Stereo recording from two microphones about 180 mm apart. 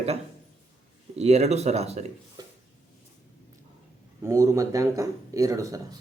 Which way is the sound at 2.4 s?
25° right (ahead or behind).